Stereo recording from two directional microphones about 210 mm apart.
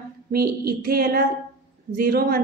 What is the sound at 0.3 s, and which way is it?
A woman's voice, 45° right (ahead or behind).